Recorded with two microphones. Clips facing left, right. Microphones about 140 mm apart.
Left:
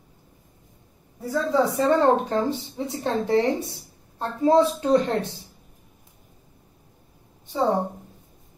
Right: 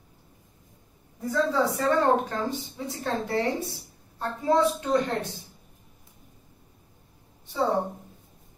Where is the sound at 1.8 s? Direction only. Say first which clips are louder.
Left 3 dB; 25° left (ahead or behind).